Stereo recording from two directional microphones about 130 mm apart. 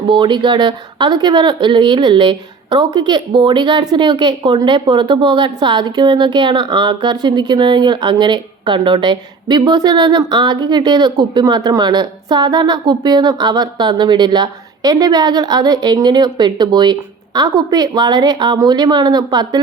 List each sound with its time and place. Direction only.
0.1 s speech: 40° right (ahead or behind)